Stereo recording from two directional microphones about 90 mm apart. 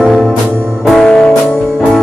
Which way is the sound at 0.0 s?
Centre (ahead or behind).